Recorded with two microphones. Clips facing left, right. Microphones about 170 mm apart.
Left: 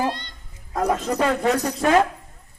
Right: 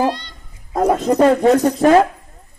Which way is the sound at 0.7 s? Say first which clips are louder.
Right 7 dB; 35° right (ahead or behind).